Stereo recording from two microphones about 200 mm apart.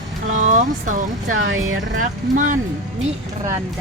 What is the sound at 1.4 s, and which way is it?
Speech, 90° right.